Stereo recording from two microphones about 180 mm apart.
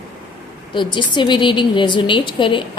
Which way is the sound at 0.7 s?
25° left (ahead or behind).